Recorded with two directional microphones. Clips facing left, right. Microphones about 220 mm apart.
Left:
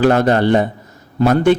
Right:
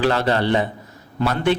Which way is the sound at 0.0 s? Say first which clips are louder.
Left 6 dB; 45° left (ahead or behind).